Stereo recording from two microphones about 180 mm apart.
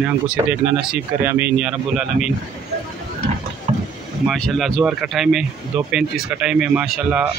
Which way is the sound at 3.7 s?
40° right (ahead or behind).